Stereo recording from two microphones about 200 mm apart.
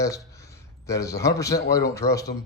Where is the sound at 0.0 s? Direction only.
15° left (ahead or behind).